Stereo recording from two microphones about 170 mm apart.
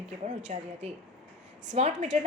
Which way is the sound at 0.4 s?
40° right (ahead or behind).